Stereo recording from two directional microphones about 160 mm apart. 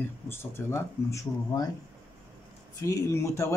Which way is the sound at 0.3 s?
15° left (ahead or behind).